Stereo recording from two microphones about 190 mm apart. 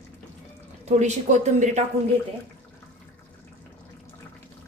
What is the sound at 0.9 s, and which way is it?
Speech, 40° right (ahead or behind).